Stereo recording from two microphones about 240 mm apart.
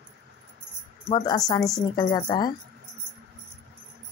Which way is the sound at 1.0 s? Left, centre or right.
Centre.